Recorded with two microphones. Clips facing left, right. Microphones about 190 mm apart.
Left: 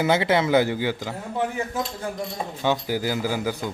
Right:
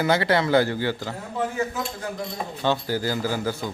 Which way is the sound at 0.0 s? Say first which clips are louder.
Left 1 dB; 20° left (ahead or behind).